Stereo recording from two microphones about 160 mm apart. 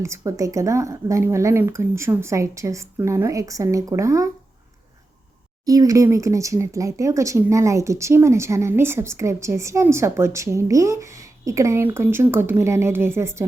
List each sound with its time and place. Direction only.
0.0 s speech: 20° right (ahead or behind)
5.6 s speech: 20° right (ahead or behind)